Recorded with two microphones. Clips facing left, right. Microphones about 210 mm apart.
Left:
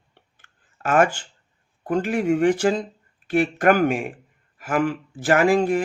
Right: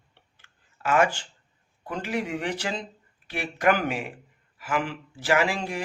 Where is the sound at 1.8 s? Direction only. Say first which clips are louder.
Left 8 dB; 50° left (ahead or behind).